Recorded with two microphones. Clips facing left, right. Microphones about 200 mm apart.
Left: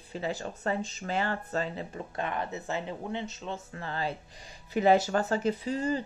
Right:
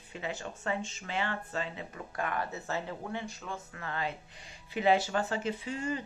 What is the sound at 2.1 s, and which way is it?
Speech, 25° left (ahead or behind).